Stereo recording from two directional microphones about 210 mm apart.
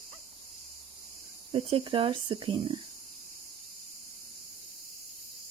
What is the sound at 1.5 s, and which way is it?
Speech, 25° right (ahead or behind).